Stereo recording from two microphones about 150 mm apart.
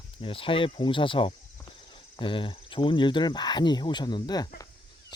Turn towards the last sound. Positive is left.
turn(degrees=25)  # may be behind; listen again after turning